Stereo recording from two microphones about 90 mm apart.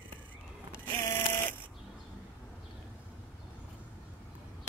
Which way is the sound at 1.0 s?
20° left (ahead or behind).